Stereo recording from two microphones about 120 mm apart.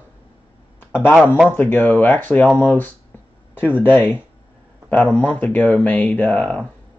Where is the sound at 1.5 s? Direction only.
15° left (ahead or behind).